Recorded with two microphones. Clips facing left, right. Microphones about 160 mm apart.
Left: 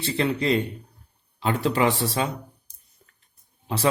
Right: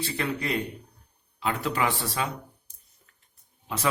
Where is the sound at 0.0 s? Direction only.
25° left (ahead or behind).